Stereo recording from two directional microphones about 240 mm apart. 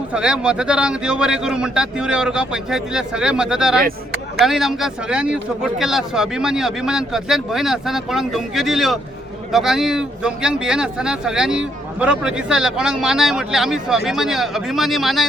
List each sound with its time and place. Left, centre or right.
0.1 s speech: centre